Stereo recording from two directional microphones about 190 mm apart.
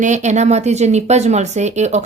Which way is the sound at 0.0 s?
40° right (ahead or behind).